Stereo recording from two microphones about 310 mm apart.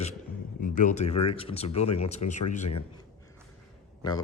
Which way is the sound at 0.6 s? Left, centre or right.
Left.